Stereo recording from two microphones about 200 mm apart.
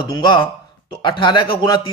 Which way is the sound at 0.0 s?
20° left (ahead or behind).